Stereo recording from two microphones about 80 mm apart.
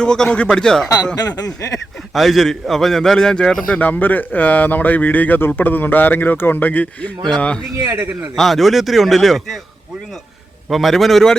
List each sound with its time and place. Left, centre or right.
0.0 s speech: centre
1.1 s speech: left
2.1 s a man's voice: centre
3.8 s speech: left
8.4 s a man's voice: centre
10.7 s a man's voice: centre